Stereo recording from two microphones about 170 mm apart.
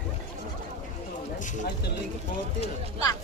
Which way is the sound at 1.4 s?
45° left (ahead or behind).